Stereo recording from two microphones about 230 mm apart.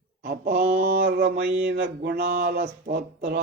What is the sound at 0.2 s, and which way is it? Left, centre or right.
Mantra, right.